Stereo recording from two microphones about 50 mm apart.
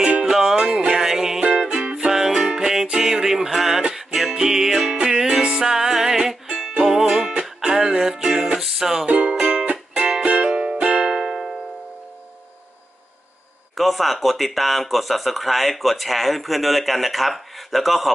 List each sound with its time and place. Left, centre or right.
0.0 s music: centre
1.4 s music: centre
9.0 s music: right
11.1 s music: centre
13.7 s speech: centre